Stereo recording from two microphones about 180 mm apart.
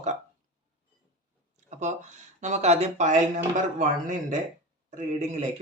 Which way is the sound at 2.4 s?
40° right (ahead or behind).